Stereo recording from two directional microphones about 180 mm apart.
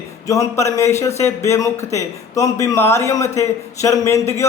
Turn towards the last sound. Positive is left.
turn(degrees=15)  # may be behind; listen again after turning